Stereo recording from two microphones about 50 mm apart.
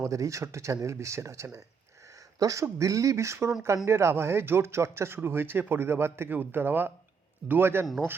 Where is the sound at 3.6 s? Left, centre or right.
Right.